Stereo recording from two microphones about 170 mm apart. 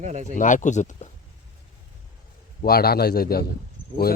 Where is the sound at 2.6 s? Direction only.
65° left (ahead or behind).